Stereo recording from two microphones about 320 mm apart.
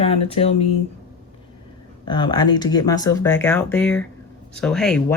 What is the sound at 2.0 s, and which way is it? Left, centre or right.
Speech, centre.